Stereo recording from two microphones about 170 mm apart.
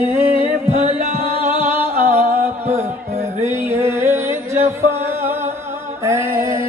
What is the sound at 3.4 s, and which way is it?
Music, 15° right (ahead or behind).